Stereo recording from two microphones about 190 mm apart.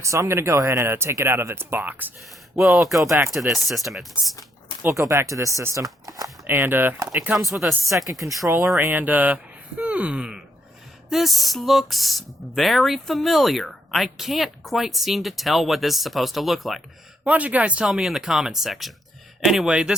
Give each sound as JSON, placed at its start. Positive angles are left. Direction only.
{"t": 0.0, "sound": "speech", "side_deg": -15}
{"t": 3.0, "sound": "speech", "side_deg": -15}
{"t": 3.3, "sound": "speech", "side_deg": 0}
{"t": 4.8, "sound": "speech", "side_deg": -15}
{"t": 8.4, "sound": "speech", "side_deg": -15}